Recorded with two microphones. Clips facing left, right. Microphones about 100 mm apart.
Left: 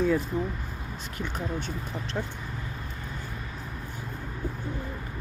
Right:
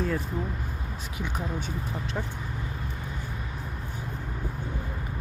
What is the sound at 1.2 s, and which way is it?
Speech, 10° right (ahead or behind).